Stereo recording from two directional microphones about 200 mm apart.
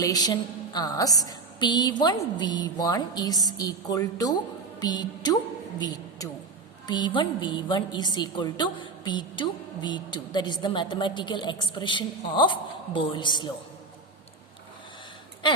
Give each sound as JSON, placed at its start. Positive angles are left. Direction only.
{"t": 0.0, "sound": "a woman's voice", "side_deg": 20}